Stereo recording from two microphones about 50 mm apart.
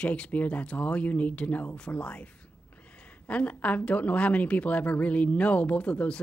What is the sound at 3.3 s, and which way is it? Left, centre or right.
A woman's voice, left.